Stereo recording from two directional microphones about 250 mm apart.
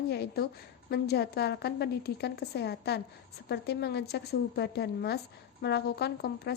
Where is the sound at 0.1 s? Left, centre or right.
Left.